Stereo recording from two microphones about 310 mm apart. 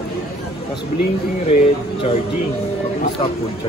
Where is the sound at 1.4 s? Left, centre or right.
Centre.